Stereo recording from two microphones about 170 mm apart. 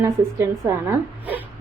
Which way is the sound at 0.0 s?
15° right (ahead or behind).